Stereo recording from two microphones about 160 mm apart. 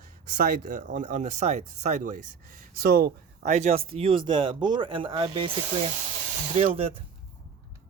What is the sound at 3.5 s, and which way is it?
Speech, 45° right (ahead or behind).